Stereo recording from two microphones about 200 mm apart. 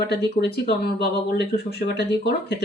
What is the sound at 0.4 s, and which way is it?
Speech, 55° left (ahead or behind).